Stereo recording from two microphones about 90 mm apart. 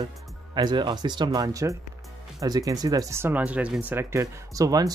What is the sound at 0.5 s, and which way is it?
Speech, 55° right (ahead or behind).